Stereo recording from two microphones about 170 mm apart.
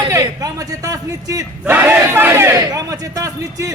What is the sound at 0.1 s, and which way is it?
A man's voice, 20° right (ahead or behind).